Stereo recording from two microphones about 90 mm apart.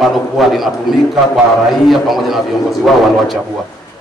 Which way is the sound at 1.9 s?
Centre (ahead or behind).